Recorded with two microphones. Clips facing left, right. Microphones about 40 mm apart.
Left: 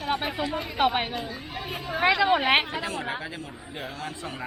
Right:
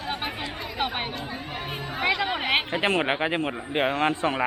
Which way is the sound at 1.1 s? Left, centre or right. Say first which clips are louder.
Even; right.